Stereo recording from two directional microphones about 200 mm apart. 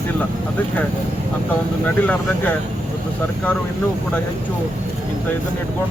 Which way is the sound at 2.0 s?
10° left (ahead or behind).